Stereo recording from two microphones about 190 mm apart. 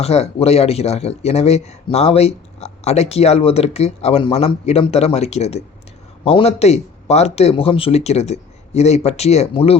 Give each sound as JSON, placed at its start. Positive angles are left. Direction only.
{"t": 0.0, "sound": "speech", "side_deg": 35}